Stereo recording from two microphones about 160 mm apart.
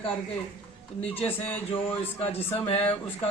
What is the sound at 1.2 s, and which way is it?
Speech, 10° left (ahead or behind).